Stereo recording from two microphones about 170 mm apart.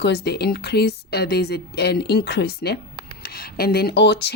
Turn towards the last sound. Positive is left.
turn(degrees=75)  # may be behind; listen again after turning